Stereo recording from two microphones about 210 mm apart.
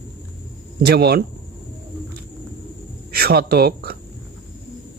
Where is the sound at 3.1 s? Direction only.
50° right (ahead or behind).